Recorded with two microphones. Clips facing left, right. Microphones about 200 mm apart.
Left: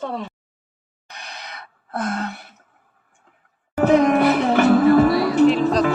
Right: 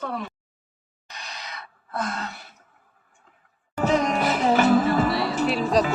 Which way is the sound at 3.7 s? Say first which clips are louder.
Left 7 dB; 60° left (ahead or behind).